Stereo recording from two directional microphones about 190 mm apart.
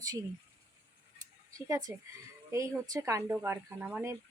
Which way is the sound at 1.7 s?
15° right (ahead or behind).